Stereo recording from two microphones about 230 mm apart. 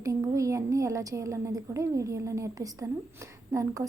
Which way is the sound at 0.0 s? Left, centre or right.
Centre.